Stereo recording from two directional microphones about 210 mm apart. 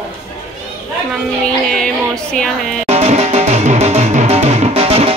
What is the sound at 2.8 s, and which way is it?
Music, 30° right (ahead or behind).